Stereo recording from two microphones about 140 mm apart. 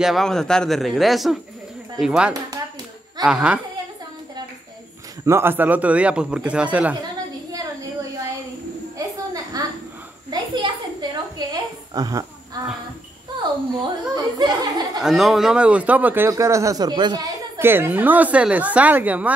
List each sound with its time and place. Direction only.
0.0 s a man's voice: centre (ahead or behind)
5.2 s speech: 15° right (ahead or behind)
7.5 s a sound: 25° right (ahead or behind)
14.1 s a sound: 30° right (ahead or behind)
15.0 s speech: centre (ahead or behind)
16.3 s speech: 20° right (ahead or behind)